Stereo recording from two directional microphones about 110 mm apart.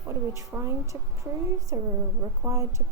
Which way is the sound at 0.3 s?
25° right (ahead or behind).